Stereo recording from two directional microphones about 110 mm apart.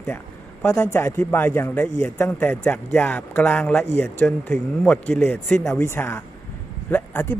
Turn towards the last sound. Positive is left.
turn(degrees=15)  # may be behind; listen again after turning